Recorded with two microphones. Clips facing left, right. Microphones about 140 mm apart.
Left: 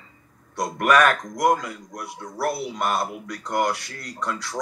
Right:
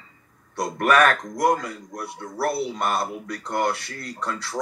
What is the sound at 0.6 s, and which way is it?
Speech, 30° right (ahead or behind).